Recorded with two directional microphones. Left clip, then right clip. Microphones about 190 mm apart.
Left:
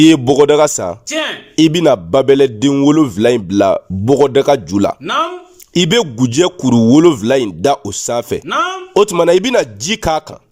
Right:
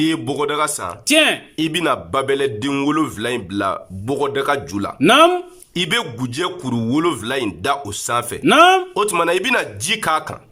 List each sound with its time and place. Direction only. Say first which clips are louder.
0.0 s a man's voice: left 11 dB; 35° left (ahead or behind)
1.0 s speech: right 9 dB; 50° right (ahead or behind)
1.5 s a man's voice: left 9 dB; 30° left (ahead or behind)
4.9 s speech: right 5 dB; 50° right (ahead or behind)
5.7 s a man's voice: left 7 dB; 35° left (ahead or behind)
8.4 s speech: right 10 dB; 50° right (ahead or behind)
9.0 s a man's voice: left 7 dB; 30° left (ahead or behind)